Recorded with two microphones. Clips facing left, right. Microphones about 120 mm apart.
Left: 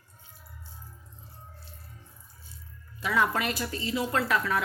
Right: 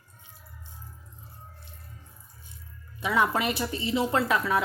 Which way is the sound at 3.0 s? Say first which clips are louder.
Right 2 dB; 20° right (ahead or behind).